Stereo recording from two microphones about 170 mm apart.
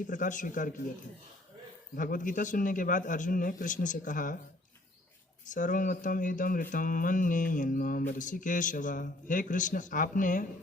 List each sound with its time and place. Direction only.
0.1 s speech: 50° left (ahead or behind)
2.0 s speech: 50° left (ahead or behind)
5.5 s speech: 50° left (ahead or behind)